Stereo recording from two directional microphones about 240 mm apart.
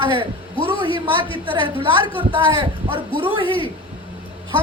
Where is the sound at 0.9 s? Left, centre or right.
Left.